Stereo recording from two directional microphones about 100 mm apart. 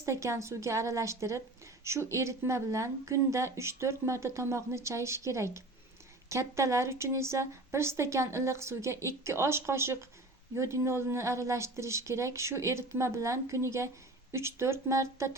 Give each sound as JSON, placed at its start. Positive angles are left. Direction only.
{"t": 0.0, "sound": "a woman's voice", "side_deg": -30}